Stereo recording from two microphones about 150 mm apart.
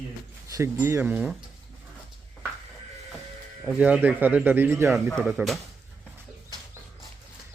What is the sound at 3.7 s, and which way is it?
Speech, 10° right (ahead or behind).